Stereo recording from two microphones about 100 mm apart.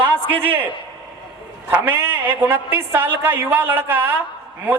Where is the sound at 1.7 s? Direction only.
15° right (ahead or behind).